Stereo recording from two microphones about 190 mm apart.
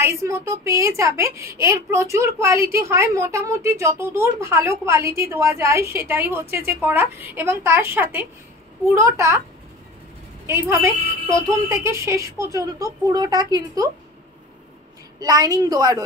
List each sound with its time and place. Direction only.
0.0 s a woman's voice: 15° right (ahead or behind)
10.4 s a woman's voice: 15° right (ahead or behind)
15.1 s a woman's voice: 20° right (ahead or behind)